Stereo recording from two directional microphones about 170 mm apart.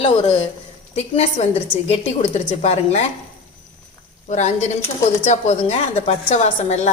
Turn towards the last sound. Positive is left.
turn(degrees=45)  # may be behind; listen again after turning